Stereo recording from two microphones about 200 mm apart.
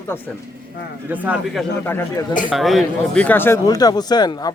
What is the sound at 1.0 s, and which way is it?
Speech, 10° right (ahead or behind).